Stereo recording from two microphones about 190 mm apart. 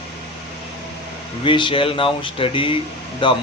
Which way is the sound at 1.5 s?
25° left (ahead or behind).